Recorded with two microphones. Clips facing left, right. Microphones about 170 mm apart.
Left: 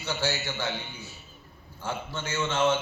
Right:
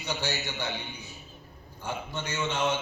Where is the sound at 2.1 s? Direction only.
15° right (ahead or behind).